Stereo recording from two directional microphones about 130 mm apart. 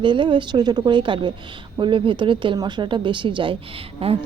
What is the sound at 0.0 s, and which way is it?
Speech, 40° right (ahead or behind).